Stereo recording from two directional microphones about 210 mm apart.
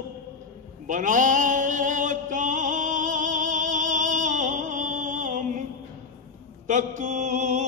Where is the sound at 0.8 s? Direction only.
35° right (ahead or behind).